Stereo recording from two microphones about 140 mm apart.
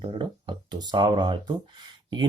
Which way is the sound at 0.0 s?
35° right (ahead or behind).